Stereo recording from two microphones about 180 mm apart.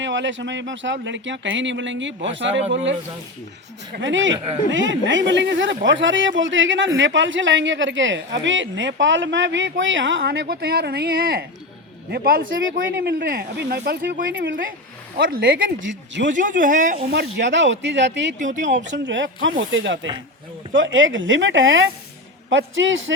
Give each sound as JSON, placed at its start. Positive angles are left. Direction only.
{"t": 0.0, "sound": "speech", "side_deg": -90}
{"t": 3.9, "sound": "speech", "side_deg": -85}
{"t": 15.8, "sound": "speech", "side_deg": -90}
{"t": 16.3, "sound": "speech", "side_deg": -45}
{"t": 17.1, "sound": "speech", "side_deg": -75}
{"t": 18.3, "sound": "speech", "side_deg": -45}
{"t": 18.8, "sound": "speech", "side_deg": -90}